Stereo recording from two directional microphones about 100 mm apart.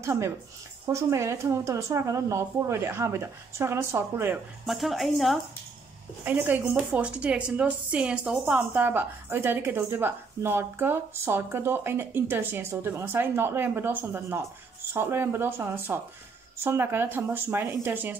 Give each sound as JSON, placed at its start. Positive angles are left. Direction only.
{"t": 0.0, "sound": "speech", "side_deg": -25}
{"t": 4.6, "sound": "speech", "side_deg": 0}
{"t": 6.2, "sound": "speech", "side_deg": -20}